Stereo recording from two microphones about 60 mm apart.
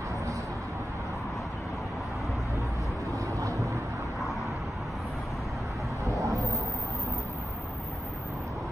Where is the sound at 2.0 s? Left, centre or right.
Centre.